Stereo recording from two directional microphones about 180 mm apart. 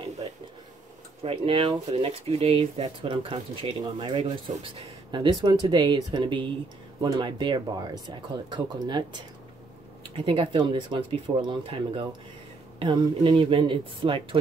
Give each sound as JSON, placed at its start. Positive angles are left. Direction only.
{"t": 1.2, "sound": "speech", "side_deg": -30}
{"t": 10.1, "sound": "speech", "side_deg": -30}